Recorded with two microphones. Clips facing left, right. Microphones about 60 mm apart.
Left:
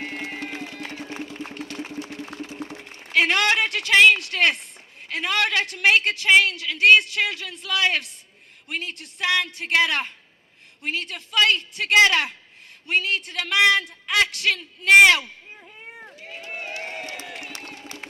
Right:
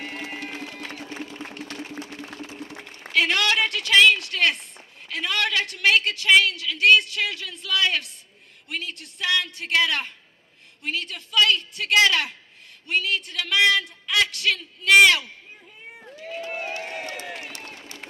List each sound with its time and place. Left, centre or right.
0.0 s music: left
1.5 s engine: left
3.1 s a woman's voice: left
17.2 s a sound: right